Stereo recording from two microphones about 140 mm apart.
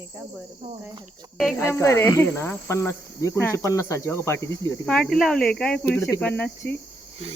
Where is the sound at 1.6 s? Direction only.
20° left (ahead or behind).